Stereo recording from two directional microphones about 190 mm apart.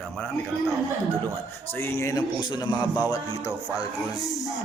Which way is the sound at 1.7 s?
10° left (ahead or behind).